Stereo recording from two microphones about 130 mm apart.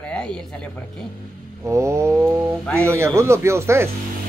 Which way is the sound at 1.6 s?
20° right (ahead or behind).